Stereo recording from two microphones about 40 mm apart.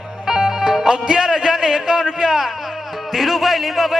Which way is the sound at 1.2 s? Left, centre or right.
Centre.